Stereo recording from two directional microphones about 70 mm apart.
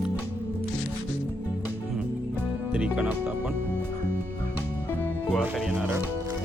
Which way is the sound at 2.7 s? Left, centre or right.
Centre.